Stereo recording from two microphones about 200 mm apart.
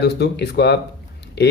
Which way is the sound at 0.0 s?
55° left (ahead or behind).